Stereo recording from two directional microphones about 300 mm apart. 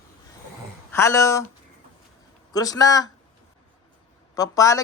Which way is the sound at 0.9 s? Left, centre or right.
Centre.